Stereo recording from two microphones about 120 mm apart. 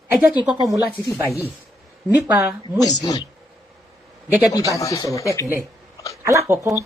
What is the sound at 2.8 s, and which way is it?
Speech, 30° left (ahead or behind).